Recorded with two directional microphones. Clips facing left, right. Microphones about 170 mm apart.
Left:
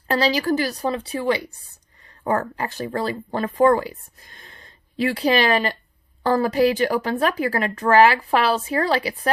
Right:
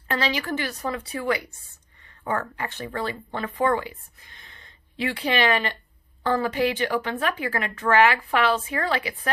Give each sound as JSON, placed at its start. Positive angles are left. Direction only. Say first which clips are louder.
{"t": 0.1, "sound": "speech", "louder": "left 6 dB", "side_deg": 35}